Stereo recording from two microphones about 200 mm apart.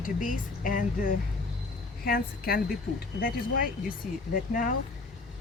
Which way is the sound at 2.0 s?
45° left (ahead or behind).